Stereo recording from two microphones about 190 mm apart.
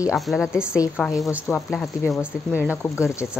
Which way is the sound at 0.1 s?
Centre (ahead or behind).